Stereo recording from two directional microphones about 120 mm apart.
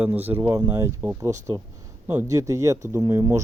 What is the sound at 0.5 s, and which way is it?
Speech, 30° right (ahead or behind).